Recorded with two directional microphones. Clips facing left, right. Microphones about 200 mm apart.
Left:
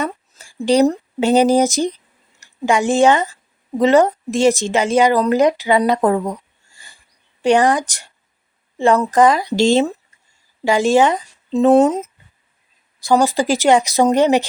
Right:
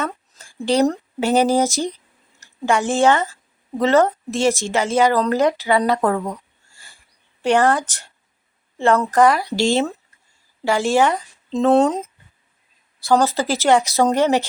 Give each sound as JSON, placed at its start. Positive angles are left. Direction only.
{"t": 0.0, "sound": "speech", "side_deg": 15}
{"t": 7.4, "sound": "speech", "side_deg": 15}
{"t": 11.5, "sound": "speech", "side_deg": 10}